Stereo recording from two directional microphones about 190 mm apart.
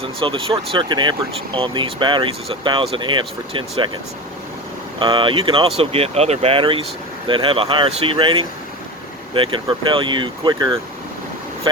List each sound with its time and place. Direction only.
0.2 s speech: 25° right (ahead or behind)
4.9 s speech: 25° right (ahead or behind)